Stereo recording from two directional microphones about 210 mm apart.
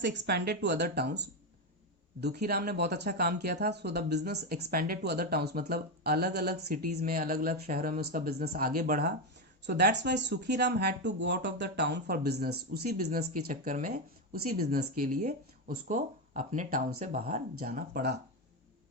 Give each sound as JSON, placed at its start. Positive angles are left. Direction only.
{"t": 0.0, "sound": "speech", "side_deg": -55}